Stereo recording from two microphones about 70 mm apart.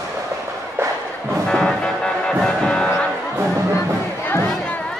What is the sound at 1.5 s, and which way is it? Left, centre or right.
Music, centre.